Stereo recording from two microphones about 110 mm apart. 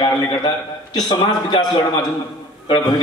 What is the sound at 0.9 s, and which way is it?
Speech, 40° left (ahead or behind).